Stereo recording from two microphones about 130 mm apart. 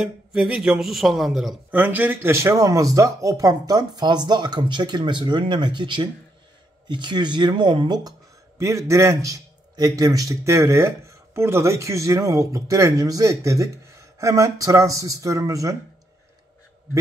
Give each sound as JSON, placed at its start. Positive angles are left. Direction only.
{"t": 0.0, "sound": "a man's voice", "side_deg": -5}
{"t": 1.7, "sound": "speech", "side_deg": -15}
{"t": 8.5, "sound": "a man's voice", "side_deg": -25}